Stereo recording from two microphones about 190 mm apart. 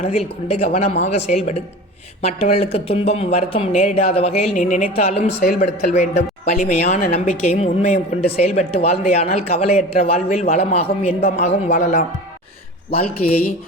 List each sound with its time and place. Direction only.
0.0 s speech: 35° left (ahead or behind)